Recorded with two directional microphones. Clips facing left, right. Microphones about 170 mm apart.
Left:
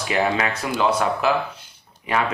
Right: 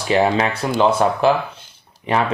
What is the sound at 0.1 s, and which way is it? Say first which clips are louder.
Speech: right 5 dB; 30° right (ahead or behind).